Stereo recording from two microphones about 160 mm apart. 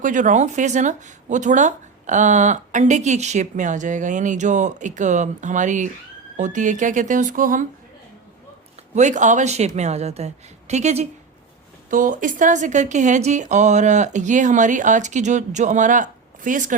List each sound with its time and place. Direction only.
0.0 s speech: 55° right (ahead or behind)
9.0 s speech: 50° right (ahead or behind)
11.9 s speech: 55° right (ahead or behind)